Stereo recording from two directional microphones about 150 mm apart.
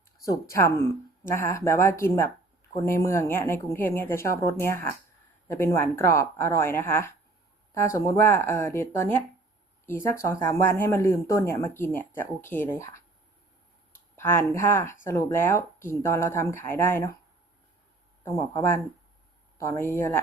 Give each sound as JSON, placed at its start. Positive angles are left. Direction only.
{"t": 0.3, "sound": "speech", "side_deg": 20}
{"t": 14.2, "sound": "speech", "side_deg": 15}
{"t": 18.2, "sound": "speech", "side_deg": 20}